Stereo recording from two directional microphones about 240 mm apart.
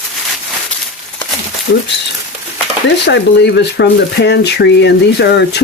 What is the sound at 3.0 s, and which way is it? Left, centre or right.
Speech, left.